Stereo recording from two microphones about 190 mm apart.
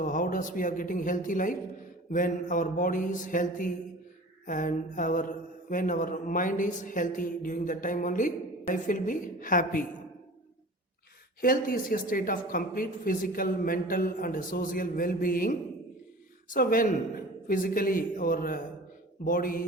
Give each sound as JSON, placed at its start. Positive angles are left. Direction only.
{"t": 0.0, "sound": "speech", "side_deg": 45}
{"t": 11.3, "sound": "speech", "side_deg": 50}